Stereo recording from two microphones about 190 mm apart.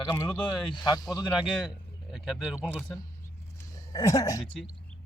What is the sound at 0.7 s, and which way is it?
Speech, 20° left (ahead or behind).